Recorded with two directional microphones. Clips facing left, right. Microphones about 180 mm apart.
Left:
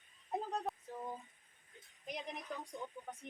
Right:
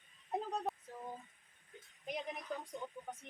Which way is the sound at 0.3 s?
Centre (ahead or behind).